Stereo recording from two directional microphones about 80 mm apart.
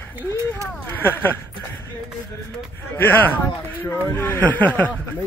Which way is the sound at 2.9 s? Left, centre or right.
Left.